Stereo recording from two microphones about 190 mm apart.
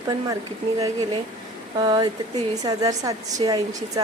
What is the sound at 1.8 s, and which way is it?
A woman's voice, 20° right (ahead or behind).